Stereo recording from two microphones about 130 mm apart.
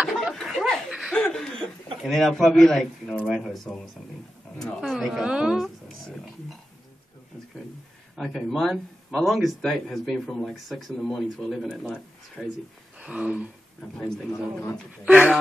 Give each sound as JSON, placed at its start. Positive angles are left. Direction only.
{"t": 0.0, "sound": "laughter", "side_deg": -5}
{"t": 2.0, "sound": "speech", "side_deg": 0}
{"t": 8.2, "sound": "speech", "side_deg": 0}
{"t": 13.0, "sound": "speech", "side_deg": -10}
{"t": 13.9, "sound": "speech", "side_deg": 5}
{"t": 15.0, "sound": "speech", "side_deg": -10}